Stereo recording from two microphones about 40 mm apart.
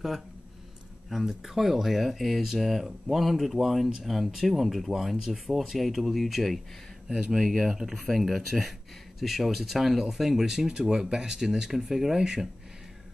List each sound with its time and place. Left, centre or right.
1.1 s speech: centre
7.1 s speech: right
7.3 s speech: centre